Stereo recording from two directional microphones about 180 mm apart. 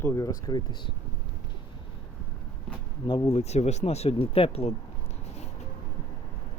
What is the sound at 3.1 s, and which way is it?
Speech, 20° left (ahead or behind).